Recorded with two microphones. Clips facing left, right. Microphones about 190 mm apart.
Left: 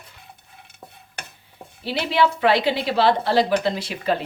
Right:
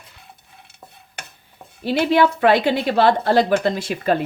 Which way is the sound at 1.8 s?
50° right (ahead or behind).